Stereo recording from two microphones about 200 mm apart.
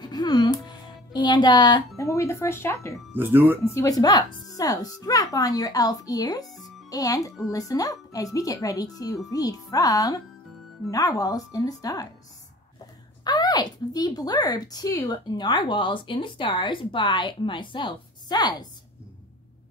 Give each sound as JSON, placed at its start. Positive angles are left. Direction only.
{"t": 0.0, "sound": "music", "side_deg": 20}
{"t": 2.0, "sound": "speech", "side_deg": 15}
{"t": 3.1, "sound": "speech", "side_deg": -10}
{"t": 3.6, "sound": "speech", "side_deg": 15}
{"t": 6.4, "sound": "a child's voice", "side_deg": 0}
{"t": 6.9, "sound": "speech", "side_deg": 15}
{"t": 13.2, "sound": "speech", "side_deg": 20}